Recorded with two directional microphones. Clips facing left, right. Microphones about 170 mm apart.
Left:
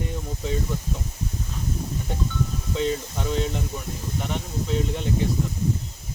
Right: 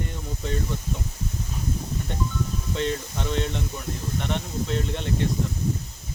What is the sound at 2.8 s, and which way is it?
Speech, 5° left (ahead or behind).